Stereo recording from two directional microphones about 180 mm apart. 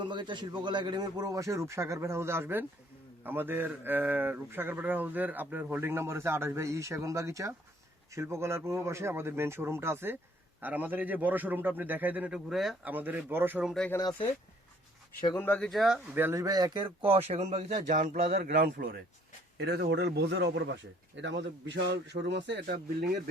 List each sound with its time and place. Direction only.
0.0 s speech: 25° right (ahead or behind); by 13.8 s 5° right (ahead or behind)
14.0 s speech: 20° left (ahead or behind)
15.4 s speech: 10° left (ahead or behind)
16.1 s speech: 15° right (ahead or behind); by 18.9 s 50° right (ahead or behind)
19.5 s a man's voice: 65° right (ahead or behind)